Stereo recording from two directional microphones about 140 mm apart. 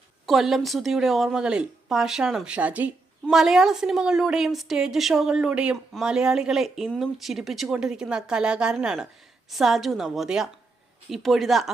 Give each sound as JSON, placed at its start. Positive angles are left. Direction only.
{"t": 0.3, "sound": "speech", "side_deg": 0}